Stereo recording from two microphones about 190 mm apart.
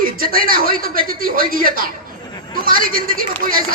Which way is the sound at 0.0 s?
50° right (ahead or behind).